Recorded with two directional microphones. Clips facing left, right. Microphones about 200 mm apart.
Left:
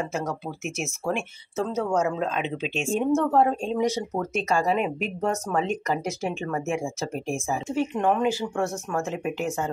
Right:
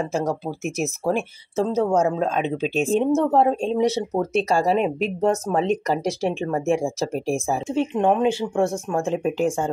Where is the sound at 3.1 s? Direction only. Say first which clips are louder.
Right 3 dB; 20° right (ahead or behind).